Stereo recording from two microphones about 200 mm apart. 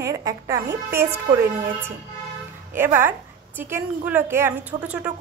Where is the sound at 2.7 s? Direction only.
10° right (ahead or behind).